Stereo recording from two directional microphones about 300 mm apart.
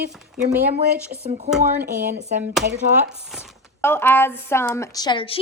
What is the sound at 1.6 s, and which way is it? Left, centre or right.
Speech, right.